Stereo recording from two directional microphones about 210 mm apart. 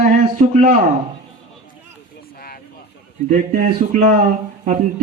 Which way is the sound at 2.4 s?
45° left (ahead or behind).